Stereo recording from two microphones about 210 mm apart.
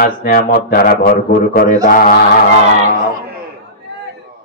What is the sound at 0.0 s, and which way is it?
Speech, 45° left (ahead or behind).